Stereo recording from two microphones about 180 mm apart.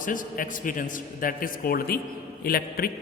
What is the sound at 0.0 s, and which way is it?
A man's voice, 45° left (ahead or behind).